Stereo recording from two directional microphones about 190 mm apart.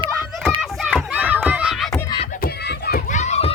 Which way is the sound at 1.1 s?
10° right (ahead or behind).